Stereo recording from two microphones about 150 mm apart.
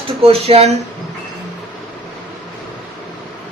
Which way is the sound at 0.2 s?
40° right (ahead or behind).